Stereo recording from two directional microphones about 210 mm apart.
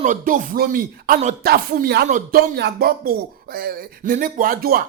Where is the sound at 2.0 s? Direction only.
35° right (ahead or behind).